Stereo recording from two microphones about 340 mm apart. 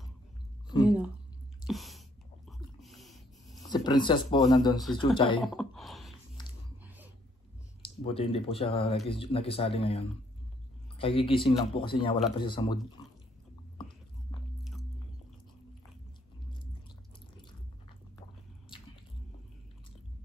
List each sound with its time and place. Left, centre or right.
1.7 s a sound: centre
3.7 s speech: centre
5.4 s a sound: centre
7.8 s speech: centre
13.0 s water: centre
13.7 s biting: centre
14.6 s biting: centre